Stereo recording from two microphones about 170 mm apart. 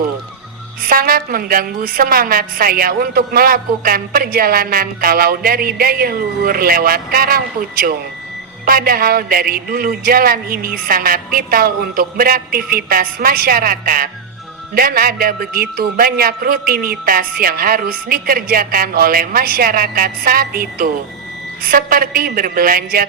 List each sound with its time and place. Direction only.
0.9 s a woman's voice: 60° right (ahead or behind)